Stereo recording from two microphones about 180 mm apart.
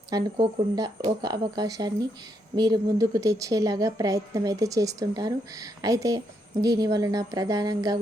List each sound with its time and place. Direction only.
0.1 s a woman's voice: 20° right (ahead or behind)